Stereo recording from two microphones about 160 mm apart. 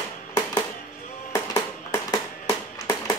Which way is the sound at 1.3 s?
20° left (ahead or behind).